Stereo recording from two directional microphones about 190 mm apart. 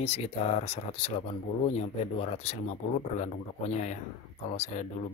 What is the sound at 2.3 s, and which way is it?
Speech, 35° left (ahead or behind).